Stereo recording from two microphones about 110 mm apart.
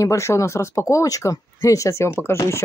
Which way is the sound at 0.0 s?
30° left (ahead or behind).